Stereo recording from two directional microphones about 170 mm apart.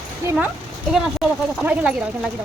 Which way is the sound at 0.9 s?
5° right (ahead or behind).